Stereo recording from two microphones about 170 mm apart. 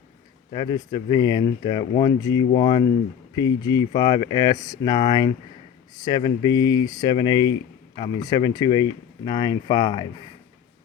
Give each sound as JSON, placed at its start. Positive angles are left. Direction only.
{"t": 0.5, "sound": "speech", "side_deg": 25}